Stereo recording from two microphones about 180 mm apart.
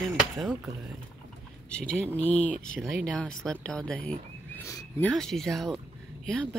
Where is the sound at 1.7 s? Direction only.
5° left (ahead or behind).